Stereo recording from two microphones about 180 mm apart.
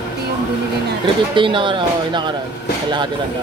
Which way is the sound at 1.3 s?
25° right (ahead or behind).